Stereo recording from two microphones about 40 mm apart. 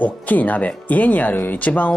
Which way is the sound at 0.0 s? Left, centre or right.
Left.